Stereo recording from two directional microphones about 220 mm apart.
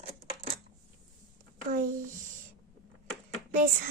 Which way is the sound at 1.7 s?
35° right (ahead or behind).